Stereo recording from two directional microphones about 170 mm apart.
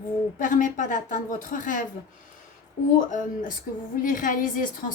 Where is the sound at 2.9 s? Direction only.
50° left (ahead or behind).